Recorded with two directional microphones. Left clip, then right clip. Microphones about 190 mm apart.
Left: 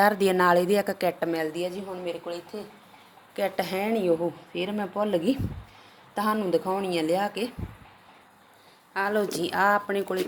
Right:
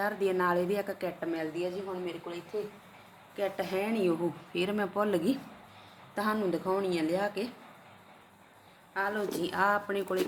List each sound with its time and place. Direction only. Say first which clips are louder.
0.0 s a woman's voice: left 8 dB; 50° left (ahead or behind); by 4.1 s 30° left (ahead or behind)
4.5 s a woman's voice: right 1 dB; 10° left (ahead or behind); by 7.5 s 30° left (ahead or behind)
8.9 s a woman's voice: left 6 dB; 40° left (ahead or behind)